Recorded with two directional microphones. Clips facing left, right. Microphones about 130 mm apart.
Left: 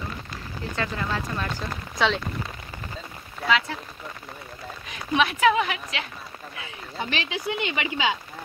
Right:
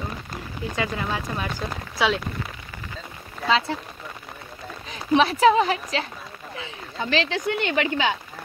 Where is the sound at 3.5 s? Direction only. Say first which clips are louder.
Right 2 dB; 30° right (ahead or behind).